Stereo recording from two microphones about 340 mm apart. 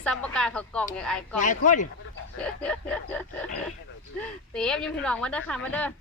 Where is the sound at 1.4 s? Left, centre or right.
Left.